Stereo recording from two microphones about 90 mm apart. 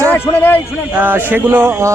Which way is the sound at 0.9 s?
20° right (ahead or behind).